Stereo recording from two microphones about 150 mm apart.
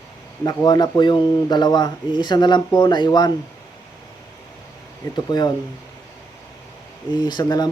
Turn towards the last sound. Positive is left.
turn(degrees=25)  # may be behind; listen again after turning